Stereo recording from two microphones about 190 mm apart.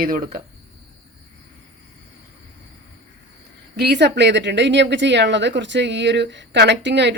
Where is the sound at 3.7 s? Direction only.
60° right (ahead or behind).